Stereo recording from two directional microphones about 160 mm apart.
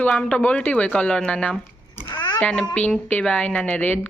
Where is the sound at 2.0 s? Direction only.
25° left (ahead or behind).